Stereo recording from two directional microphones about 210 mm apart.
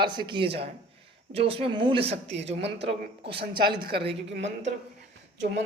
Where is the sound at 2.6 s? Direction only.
55° right (ahead or behind).